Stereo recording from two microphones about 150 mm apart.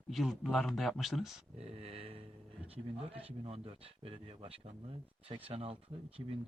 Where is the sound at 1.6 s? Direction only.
40° right (ahead or behind).